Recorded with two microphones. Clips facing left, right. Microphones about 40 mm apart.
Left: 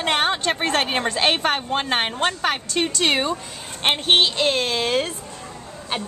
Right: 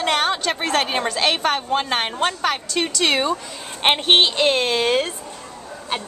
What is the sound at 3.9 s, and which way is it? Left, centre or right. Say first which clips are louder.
Speech: right 1 dB; centre.